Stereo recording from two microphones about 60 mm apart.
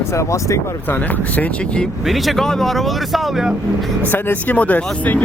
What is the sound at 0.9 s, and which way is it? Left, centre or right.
Speech, left.